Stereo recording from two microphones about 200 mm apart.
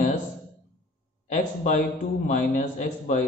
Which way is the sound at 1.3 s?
35° left (ahead or behind).